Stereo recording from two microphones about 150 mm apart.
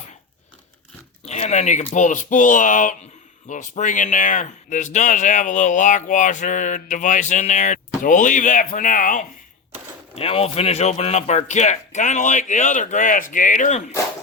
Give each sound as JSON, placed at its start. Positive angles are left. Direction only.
{"t": 1.3, "sound": "speech", "side_deg": 50}
{"t": 10.2, "sound": "speech", "side_deg": 40}